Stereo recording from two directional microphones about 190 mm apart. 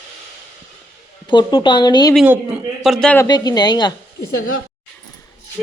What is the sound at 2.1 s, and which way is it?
A man's voice, 5° right (ahead or behind).